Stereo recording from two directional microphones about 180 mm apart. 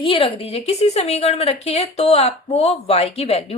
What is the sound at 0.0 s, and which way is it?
A woman's voice, 30° left (ahead or behind).